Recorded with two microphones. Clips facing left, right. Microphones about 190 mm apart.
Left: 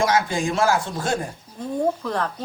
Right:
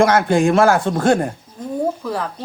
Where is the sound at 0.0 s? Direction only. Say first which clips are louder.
Right 7 dB; 60° right (ahead or behind).